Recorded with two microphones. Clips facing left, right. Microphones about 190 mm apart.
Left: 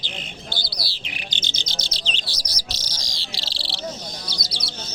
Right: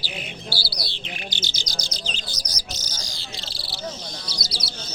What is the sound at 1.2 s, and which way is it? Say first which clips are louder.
Chirp: right 2 dB; 20° left (ahead or behind).